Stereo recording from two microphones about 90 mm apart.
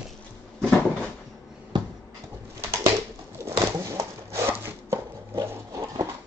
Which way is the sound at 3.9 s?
35° right (ahead or behind).